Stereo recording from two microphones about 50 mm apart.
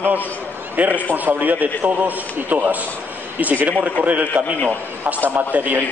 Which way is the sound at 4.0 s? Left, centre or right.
Right.